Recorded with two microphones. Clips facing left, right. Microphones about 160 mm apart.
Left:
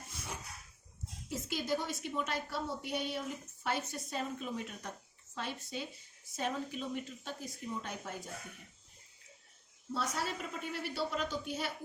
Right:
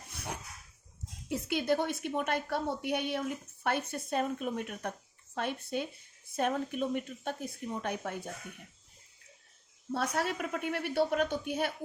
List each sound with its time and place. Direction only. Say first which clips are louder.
0.1 s a sound: right 5 dB; 60° right (ahead or behind)
1.3 s a woman's voice: right 6 dB; 65° right (ahead or behind)
9.9 s a woman's voice: right 5 dB; 55° right (ahead or behind)